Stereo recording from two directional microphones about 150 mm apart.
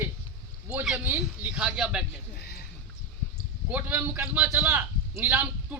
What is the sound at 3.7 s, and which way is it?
Speech, 10° right (ahead or behind).